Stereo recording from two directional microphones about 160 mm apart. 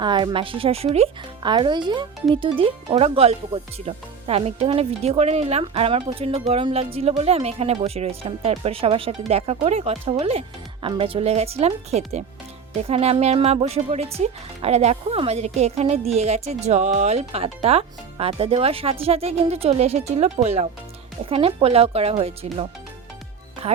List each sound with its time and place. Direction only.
0.0 s a woman's voice: 30° right (ahead or behind)